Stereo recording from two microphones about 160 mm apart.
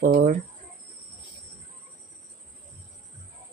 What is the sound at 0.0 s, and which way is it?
Speech, 60° right (ahead or behind).